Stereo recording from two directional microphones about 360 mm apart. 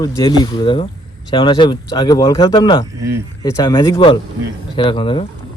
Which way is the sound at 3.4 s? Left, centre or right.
Centre.